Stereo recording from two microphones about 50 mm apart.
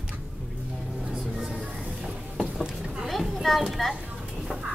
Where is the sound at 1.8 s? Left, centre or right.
Centre.